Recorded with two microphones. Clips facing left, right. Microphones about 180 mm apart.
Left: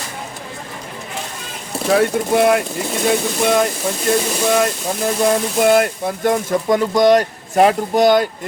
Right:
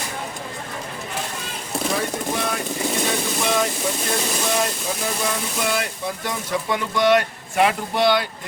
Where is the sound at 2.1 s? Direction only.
65° left (ahead or behind).